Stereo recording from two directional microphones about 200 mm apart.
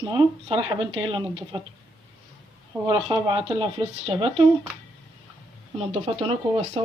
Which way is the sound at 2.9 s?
25° right (ahead or behind).